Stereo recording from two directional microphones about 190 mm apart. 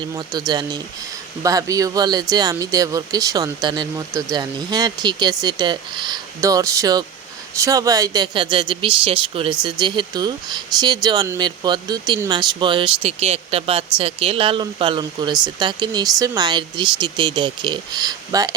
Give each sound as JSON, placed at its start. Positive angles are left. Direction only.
{"t": 0.3, "sound": "speech", "side_deg": -20}